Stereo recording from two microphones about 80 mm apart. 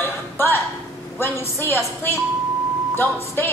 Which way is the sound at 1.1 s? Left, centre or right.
Left.